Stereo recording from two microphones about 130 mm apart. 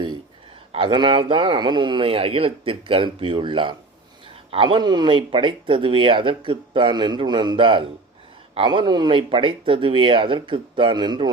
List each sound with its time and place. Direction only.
0.7 s speech: 40° right (ahead or behind)